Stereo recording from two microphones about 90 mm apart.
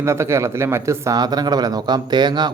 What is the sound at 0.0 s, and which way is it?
Speech, 30° right (ahead or behind).